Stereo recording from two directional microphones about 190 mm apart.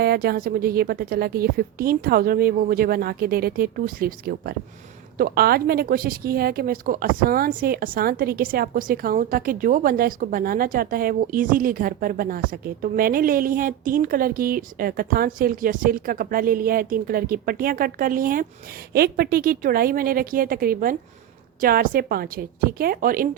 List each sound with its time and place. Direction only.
0.0 s a woman's voice: 55° right (ahead or behind)